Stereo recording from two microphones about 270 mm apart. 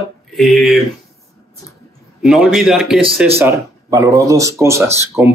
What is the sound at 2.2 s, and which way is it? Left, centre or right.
Speech, centre.